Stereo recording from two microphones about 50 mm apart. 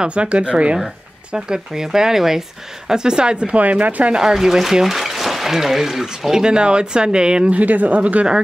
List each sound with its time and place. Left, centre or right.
0.0 s speech: right
1.3 s speech: centre; by 4.1 s right
4.1 s speech: centre; by 8.3 s right